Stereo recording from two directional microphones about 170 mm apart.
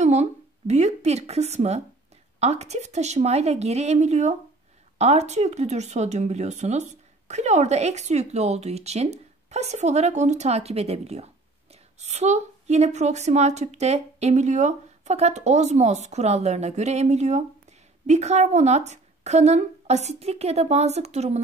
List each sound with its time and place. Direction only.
0.0 s speech: 40° right (ahead or behind)